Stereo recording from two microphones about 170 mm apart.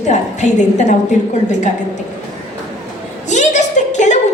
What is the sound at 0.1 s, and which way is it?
Speech, 45° left (ahead or behind).